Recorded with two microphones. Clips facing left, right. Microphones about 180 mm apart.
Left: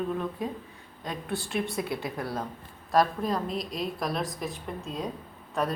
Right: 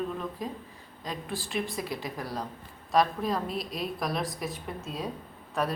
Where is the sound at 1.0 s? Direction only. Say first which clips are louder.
Left 2 dB; centre (ahead or behind).